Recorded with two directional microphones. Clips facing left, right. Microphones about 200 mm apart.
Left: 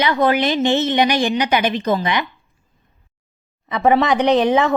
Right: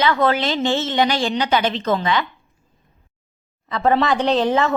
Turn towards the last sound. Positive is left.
turn(degrees=15)  # may be behind; listen again after turning